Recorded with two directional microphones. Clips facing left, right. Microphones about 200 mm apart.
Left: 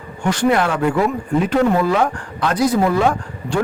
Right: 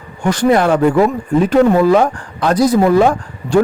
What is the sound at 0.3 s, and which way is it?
Speech, 40° right (ahead or behind).